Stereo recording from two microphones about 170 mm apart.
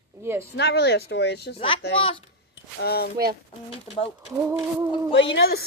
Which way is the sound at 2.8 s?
65° left (ahead or behind).